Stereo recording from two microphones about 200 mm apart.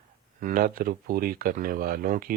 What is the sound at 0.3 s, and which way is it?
Speech, 45° right (ahead or behind).